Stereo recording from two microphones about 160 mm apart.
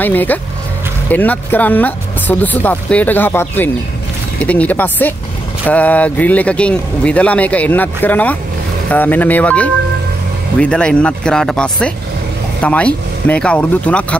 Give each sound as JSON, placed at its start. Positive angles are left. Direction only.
{"t": 0.0, "sound": "speech", "side_deg": 10}